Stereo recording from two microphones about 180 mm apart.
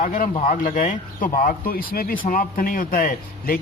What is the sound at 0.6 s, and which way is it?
A man's voice, 45° left (ahead or behind).